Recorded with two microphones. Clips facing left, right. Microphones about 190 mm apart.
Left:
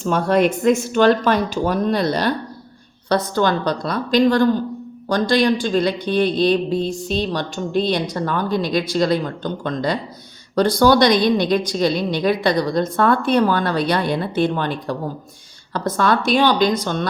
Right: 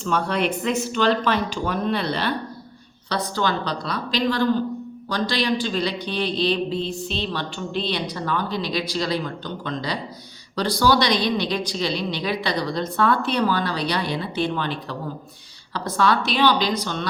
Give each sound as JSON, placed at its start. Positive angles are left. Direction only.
{"t": 0.0, "sound": "speech", "side_deg": 45}
{"t": 16.0, "sound": "speech", "side_deg": 50}